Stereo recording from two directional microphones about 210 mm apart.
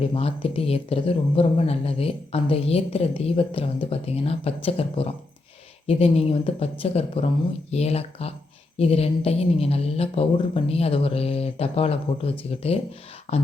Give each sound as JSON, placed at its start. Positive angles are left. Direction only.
{"t": 0.0, "sound": "speech", "side_deg": 25}